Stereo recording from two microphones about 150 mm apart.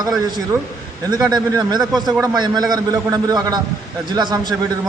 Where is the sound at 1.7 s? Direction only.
Centre (ahead or behind).